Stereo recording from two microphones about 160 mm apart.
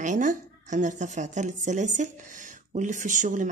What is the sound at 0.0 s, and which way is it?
Speech, 50° right (ahead or behind).